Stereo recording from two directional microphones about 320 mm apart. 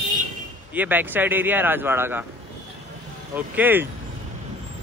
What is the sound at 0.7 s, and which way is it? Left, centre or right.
Speech, centre.